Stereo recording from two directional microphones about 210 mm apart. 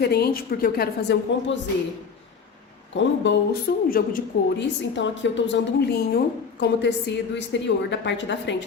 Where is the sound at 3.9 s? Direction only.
45° left (ahead or behind).